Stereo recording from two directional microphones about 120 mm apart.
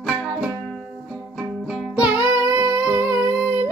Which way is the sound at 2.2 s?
25° right (ahead or behind).